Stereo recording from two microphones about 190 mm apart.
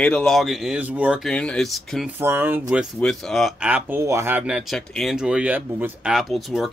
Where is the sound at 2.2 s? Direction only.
10° right (ahead or behind).